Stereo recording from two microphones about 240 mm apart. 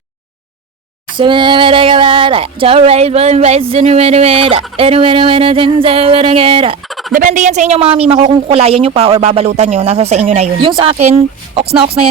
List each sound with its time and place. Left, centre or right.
1.1 s a woman's voice: centre
6.8 s fowl: centre
7.1 s a woman's voice: right